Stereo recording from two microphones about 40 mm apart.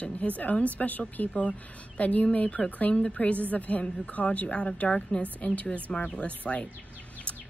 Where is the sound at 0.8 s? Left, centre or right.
Left.